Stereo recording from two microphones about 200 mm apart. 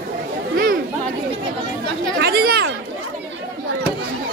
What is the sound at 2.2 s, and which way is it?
Speech, 50° right (ahead or behind).